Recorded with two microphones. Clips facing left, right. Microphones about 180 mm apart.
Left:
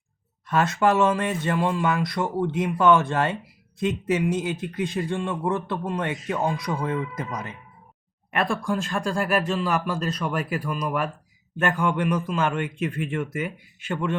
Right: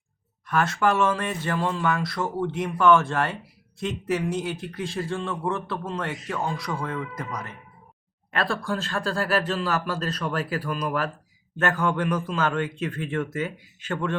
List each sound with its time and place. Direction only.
0.4 s a man's voice: 20° left (ahead or behind)